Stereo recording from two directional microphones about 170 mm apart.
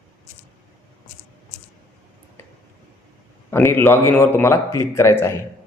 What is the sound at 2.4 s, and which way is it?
Tick-tock, 15° left (ahead or behind).